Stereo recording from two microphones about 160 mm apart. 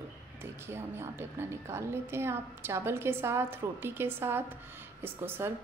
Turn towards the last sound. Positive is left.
turn(degrees=-15)  # may be behind; listen again after turning